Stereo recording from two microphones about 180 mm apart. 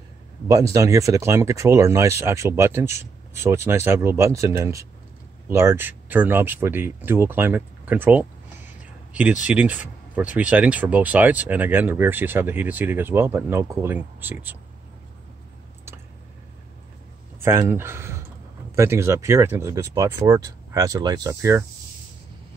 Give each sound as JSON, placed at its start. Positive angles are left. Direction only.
{"t": 0.5, "sound": "speech", "side_deg": -20}
{"t": 9.4, "sound": "speech", "side_deg": -10}
{"t": 17.4, "sound": "speech", "side_deg": -15}